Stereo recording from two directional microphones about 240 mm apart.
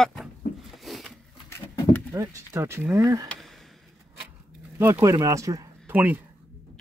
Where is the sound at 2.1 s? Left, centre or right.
Centre.